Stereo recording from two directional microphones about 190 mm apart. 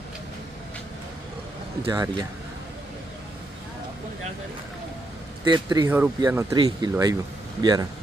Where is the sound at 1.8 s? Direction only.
20° right (ahead or behind).